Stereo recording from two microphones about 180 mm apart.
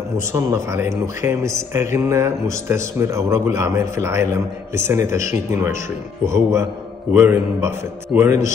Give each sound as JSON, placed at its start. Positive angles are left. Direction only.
{"t": 0.3, "sound": "speech", "side_deg": -15}